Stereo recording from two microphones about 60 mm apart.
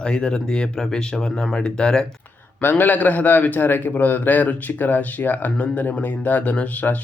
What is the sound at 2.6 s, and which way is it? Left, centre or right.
A man's voice, left.